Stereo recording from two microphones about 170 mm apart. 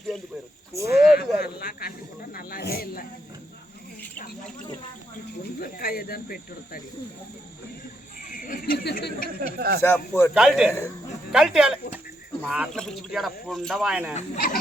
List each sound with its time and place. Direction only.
0.8 s a sound: 65° left (ahead or behind)
2.3 s snake: 60° left (ahead or behind)
5.5 s speech: 60° left (ahead or behind)
8.2 s a sound: 55° left (ahead or behind)
9.6 s speech: 65° right (ahead or behind)
9.8 s speech: 15° left (ahead or behind)
10.3 s speech: 5° right (ahead or behind)